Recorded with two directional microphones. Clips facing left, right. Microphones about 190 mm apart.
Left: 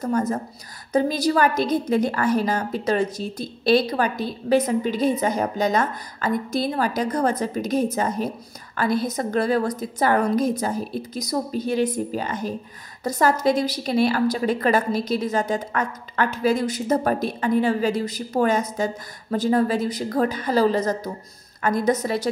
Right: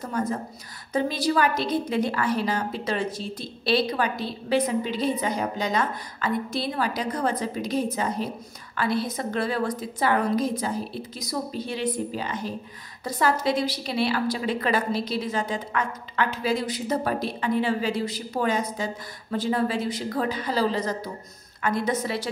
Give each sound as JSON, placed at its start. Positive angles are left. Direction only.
{"t": 0.0, "sound": "a woman's voice", "side_deg": 45}